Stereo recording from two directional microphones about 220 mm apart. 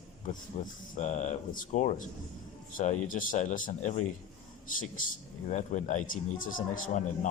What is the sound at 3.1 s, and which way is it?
Speech, 35° left (ahead or behind).